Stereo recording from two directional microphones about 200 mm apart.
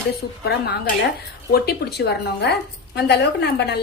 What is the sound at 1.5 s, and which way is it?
A woman's voice, 50° left (ahead or behind).